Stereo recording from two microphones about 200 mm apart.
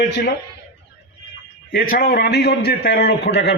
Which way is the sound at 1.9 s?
50° left (ahead or behind).